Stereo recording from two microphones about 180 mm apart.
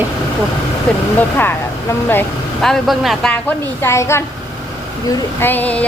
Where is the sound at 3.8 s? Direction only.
15° left (ahead or behind).